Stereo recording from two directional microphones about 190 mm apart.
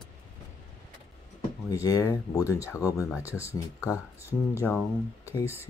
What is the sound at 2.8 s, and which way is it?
Speech, 10° right (ahead or behind).